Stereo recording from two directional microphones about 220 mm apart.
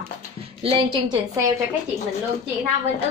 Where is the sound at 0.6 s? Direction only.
25° right (ahead or behind).